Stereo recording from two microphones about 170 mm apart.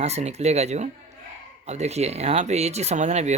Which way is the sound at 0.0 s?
40° right (ahead or behind).